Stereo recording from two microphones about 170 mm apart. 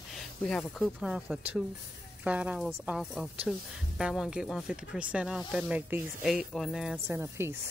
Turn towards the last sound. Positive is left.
turn(degrees=-15)  # may be behind; listen again after turning